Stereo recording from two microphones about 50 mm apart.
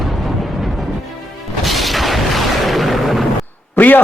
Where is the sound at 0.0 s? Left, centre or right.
Centre.